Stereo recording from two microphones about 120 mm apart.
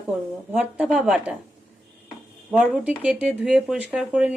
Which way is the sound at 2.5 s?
10° right (ahead or behind).